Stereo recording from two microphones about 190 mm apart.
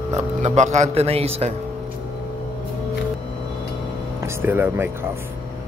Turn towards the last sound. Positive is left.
turn(degrees=-10)  # may be behind; listen again after turning